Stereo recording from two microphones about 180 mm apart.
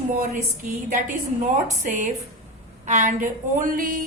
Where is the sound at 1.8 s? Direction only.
45° right (ahead or behind).